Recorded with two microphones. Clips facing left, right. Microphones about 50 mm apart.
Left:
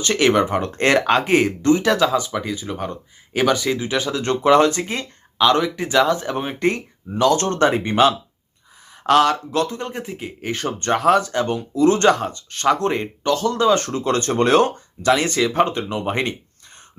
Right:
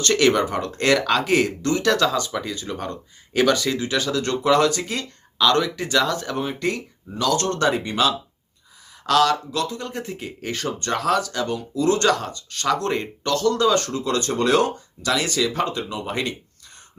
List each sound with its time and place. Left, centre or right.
0.0 s speech: centre
10.0 s speech: centre
10.5 s speech: left